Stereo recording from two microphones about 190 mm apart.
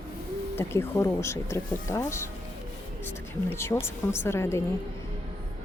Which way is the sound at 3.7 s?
20° left (ahead or behind).